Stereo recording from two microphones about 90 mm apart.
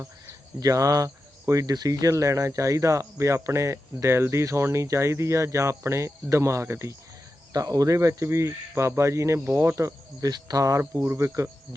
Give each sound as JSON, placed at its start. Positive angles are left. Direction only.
{"t": 0.6, "sound": "speech", "side_deg": -40}
{"t": 7.5, "sound": "speech", "side_deg": -45}